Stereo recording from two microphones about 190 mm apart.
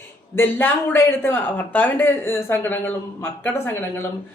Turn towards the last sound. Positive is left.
turn(degrees=15)  # may be behind; listen again after turning